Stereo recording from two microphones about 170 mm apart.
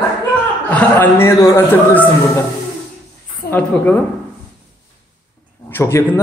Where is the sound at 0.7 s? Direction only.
10° left (ahead or behind).